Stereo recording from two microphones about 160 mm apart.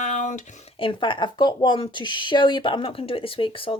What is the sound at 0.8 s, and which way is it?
Speech, 30° left (ahead or behind).